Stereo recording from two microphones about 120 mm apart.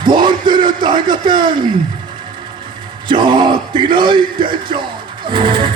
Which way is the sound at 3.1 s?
40° right (ahead or behind).